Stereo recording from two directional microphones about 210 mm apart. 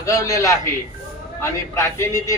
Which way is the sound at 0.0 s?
15° left (ahead or behind).